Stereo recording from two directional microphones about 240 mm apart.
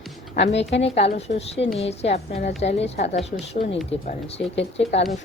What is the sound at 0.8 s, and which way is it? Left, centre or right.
A woman's voice, left.